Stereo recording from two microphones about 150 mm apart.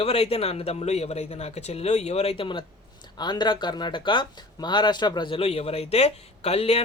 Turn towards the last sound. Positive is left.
turn(degrees=45)  # may be behind; listen again after turning